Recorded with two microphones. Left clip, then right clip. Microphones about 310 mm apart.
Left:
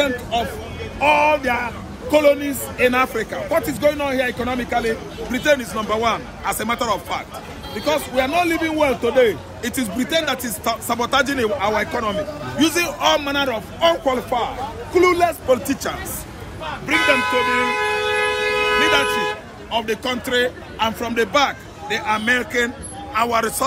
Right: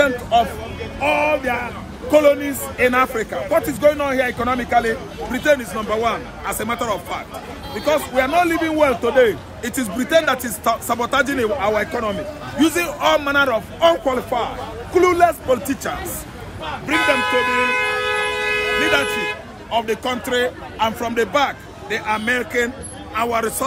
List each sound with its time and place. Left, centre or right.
0.0 s speech: centre
1.0 s a man's voice: centre
18.7 s speech: centre
19.7 s a man's voice: centre